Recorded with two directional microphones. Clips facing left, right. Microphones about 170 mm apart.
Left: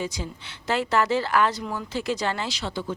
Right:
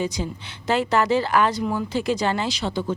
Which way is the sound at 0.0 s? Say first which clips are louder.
Right 5 dB; 20° right (ahead or behind).